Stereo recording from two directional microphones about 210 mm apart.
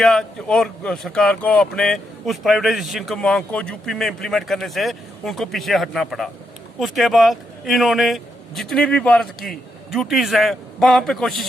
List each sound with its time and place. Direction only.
0.0 s speech: centre (ahead or behind)